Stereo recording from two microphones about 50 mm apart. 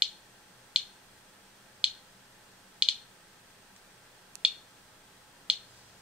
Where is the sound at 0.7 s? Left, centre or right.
Centre.